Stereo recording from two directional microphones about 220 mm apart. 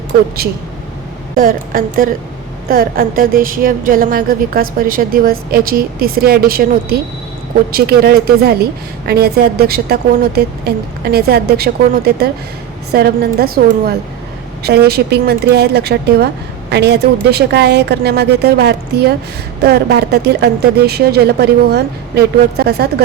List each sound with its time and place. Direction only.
1.4 s a woman's voice: 40° right (ahead or behind)